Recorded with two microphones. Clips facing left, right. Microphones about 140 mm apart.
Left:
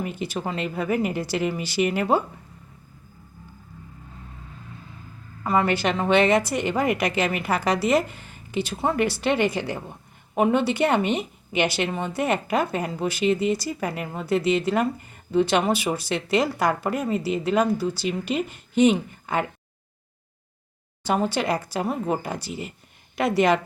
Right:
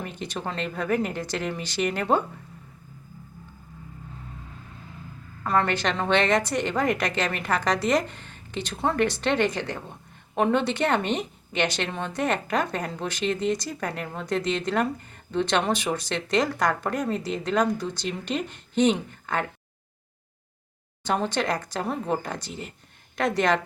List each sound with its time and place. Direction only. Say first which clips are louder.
0.0 s a woman's voice: left 4 dB; 10° left (ahead or behind)
5.4 s a woman's voice: left 2 dB; 5° left (ahead or behind)
21.0 s a woman's voice: left 2 dB; 10° left (ahead or behind)